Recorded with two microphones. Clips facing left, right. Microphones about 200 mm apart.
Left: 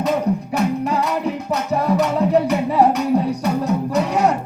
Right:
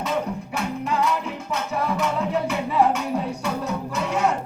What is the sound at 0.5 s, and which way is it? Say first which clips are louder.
Music: left 3 dB; 40° left (ahead or behind).